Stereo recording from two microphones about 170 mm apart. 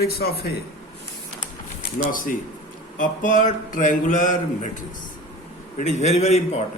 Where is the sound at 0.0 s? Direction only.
70° left (ahead or behind).